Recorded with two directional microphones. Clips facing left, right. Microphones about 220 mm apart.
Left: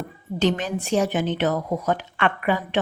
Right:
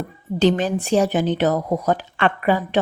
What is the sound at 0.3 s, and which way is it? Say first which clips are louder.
Speech: right 5 dB; 35° right (ahead or behind).